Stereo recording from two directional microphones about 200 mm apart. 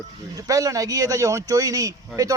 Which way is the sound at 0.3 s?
15° right (ahead or behind).